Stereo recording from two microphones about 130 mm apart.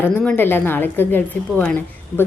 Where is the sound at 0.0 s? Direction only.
10° left (ahead or behind).